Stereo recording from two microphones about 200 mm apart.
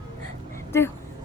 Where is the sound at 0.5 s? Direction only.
10° left (ahead or behind).